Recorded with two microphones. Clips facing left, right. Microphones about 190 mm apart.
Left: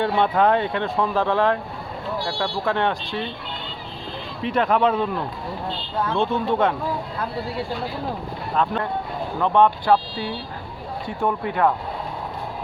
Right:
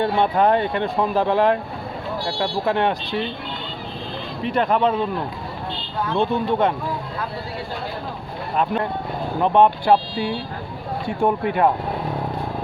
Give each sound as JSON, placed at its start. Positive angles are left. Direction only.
{"t": 0.0, "sound": "speech", "side_deg": -5}
{"t": 4.4, "sound": "speech", "side_deg": 0}
{"t": 6.1, "sound": "speech", "side_deg": -5}
{"t": 8.5, "sound": "speech", "side_deg": -15}
{"t": 11.2, "sound": "speech", "side_deg": -20}